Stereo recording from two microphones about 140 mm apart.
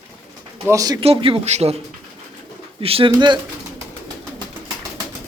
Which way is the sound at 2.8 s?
40° right (ahead or behind).